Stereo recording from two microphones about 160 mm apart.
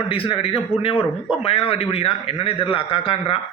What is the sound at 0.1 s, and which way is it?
A man's voice, 35° left (ahead or behind).